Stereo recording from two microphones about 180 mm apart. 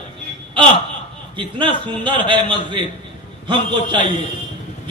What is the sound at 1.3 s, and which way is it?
A man's voice, 30° right (ahead or behind).